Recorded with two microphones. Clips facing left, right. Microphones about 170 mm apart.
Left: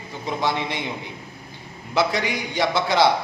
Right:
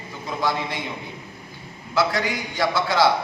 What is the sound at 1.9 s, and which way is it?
A man's voice, 20° left (ahead or behind).